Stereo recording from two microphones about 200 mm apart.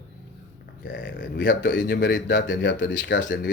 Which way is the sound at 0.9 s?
65° left (ahead or behind).